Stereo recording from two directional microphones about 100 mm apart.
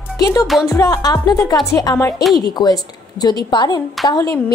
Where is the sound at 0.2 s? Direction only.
35° left (ahead or behind).